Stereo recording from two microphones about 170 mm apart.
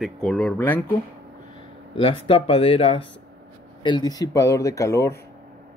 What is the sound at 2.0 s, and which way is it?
Speech, 35° left (ahead or behind).